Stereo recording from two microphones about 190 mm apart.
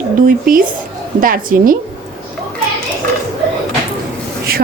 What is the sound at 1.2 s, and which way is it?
Speech, 45° right (ahead or behind).